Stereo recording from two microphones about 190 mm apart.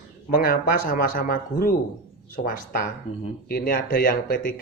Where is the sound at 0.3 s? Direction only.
50° left (ahead or behind).